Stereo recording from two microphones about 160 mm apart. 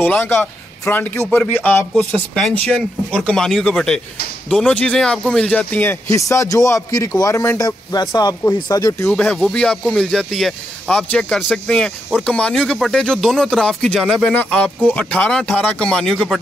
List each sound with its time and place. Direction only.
0.0 s a man's voice: 10° left (ahead or behind)
9.1 s speech: 5° left (ahead or behind)